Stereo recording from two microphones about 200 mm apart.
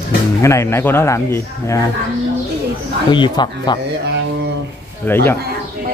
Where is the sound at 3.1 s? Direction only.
25° left (ahead or behind).